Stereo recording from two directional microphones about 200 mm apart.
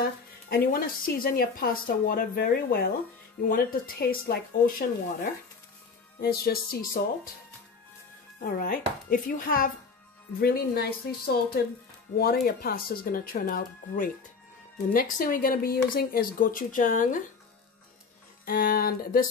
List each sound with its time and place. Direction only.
0.5 s speech: 50° left (ahead or behind)
6.4 s speech: 50° left (ahead or behind)
8.5 s speech: 40° left (ahead or behind)
18.4 s speech: 45° left (ahead or behind)